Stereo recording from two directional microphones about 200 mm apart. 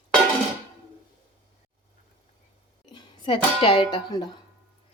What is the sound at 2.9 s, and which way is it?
Speech, 25° left (ahead or behind).